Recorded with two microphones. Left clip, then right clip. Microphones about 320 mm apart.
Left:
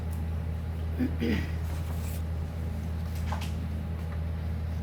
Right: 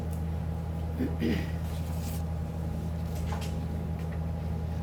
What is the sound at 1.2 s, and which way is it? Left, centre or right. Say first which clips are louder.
Speech: even; centre.